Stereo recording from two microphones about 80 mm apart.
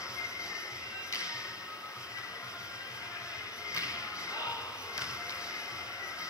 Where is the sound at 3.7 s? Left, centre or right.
Left.